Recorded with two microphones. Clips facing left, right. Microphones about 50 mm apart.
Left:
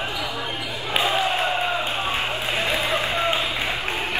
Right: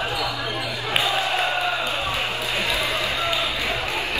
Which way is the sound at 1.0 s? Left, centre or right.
Left.